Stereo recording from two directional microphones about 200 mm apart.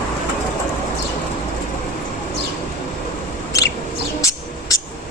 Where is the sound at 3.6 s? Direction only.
15° left (ahead or behind).